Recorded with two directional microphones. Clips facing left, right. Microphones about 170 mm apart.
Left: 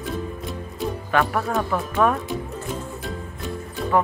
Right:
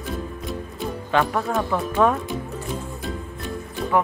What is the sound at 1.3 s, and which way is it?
Speech, centre (ahead or behind).